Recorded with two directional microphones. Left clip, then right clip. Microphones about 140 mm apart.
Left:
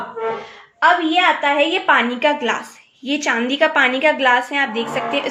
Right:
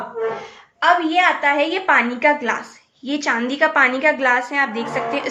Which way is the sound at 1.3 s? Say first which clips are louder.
Left 1 dB; 25° left (ahead or behind).